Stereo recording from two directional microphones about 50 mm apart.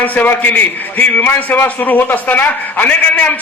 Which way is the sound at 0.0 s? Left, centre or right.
Left.